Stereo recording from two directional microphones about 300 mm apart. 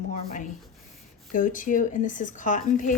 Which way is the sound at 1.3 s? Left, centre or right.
Left.